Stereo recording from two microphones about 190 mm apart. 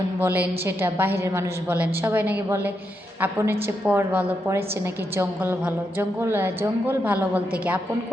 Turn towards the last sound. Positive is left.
turn(degrees=-5)  # may be behind; listen again after turning